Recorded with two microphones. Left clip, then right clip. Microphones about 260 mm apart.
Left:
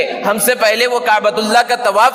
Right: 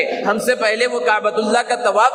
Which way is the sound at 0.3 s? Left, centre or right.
Left.